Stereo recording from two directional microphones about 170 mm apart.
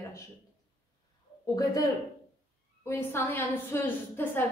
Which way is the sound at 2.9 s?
15° left (ahead or behind).